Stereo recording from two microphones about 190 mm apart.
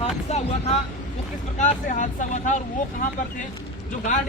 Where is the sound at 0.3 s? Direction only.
35° left (ahead or behind).